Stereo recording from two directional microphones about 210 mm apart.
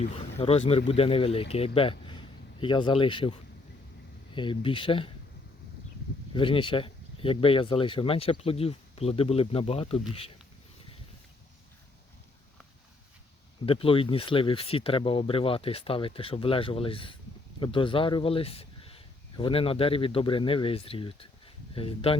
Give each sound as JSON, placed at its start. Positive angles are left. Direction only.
{"t": 0.0, "sound": "speech", "side_deg": 30}
{"t": 4.4, "sound": "speech", "side_deg": 25}
{"t": 6.3, "sound": "speech", "side_deg": 25}
{"t": 13.7, "sound": "speech", "side_deg": 25}